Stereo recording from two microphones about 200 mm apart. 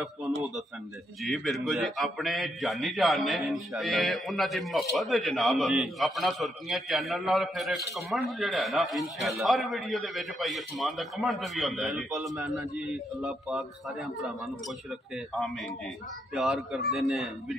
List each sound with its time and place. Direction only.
1.2 s a man's voice: centre (ahead or behind)